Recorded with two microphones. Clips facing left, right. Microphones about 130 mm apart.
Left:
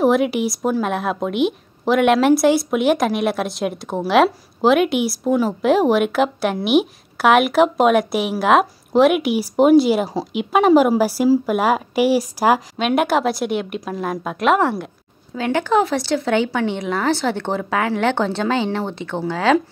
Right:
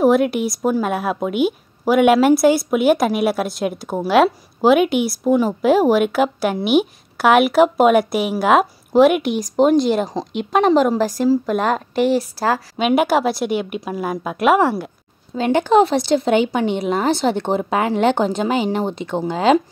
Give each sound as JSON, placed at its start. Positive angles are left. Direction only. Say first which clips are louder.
{"t": 0.0, "sound": "speech", "louder": "right 1 dB", "side_deg": 0}
{"t": 12.7, "sound": "speech", "louder": "right 2 dB", "side_deg": -5}
{"t": 15.3, "sound": "speech", "louder": "right 4 dB", "side_deg": -20}